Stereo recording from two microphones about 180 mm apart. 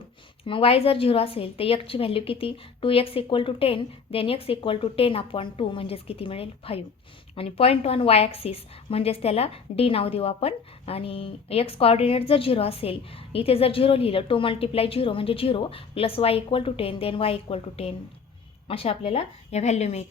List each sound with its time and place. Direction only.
0.4 s a woman's voice: 30° left (ahead or behind)